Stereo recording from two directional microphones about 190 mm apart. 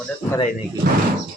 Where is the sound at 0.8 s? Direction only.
50° right (ahead or behind).